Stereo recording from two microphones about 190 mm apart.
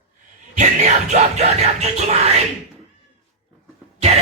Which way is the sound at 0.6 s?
40° right (ahead or behind).